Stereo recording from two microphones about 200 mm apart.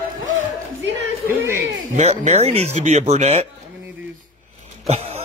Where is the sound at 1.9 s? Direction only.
30° right (ahead or behind).